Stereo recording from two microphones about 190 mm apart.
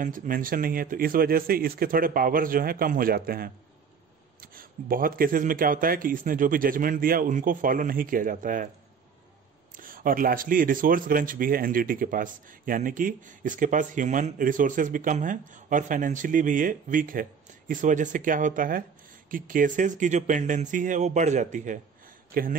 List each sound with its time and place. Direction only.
0.0 s speech: 45° right (ahead or behind)
9.8 s speech: 45° right (ahead or behind)